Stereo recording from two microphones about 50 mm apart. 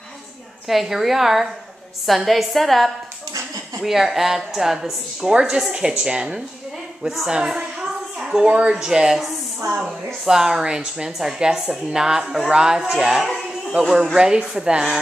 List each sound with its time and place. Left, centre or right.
0.7 s a woman's voice: centre
5.3 s a woman's voice: centre
7.2 s a sound: centre
8.7 s a woman's voice: centre